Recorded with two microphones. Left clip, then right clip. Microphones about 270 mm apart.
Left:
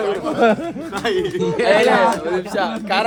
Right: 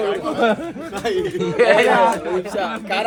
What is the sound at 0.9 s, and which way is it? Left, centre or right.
Speech, centre.